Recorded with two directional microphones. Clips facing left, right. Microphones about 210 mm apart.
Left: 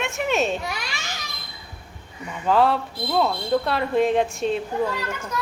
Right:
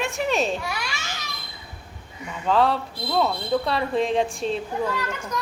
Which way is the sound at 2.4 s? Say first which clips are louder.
Left 1 dB; centre (ahead or behind).